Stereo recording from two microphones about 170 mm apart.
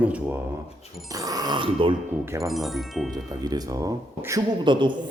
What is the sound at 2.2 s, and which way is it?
Speech, 15° right (ahead or behind).